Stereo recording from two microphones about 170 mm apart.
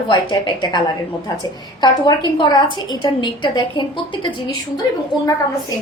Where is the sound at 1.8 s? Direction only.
25° left (ahead or behind).